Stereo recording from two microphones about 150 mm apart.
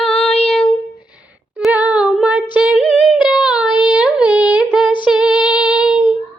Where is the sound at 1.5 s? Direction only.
10° right (ahead or behind).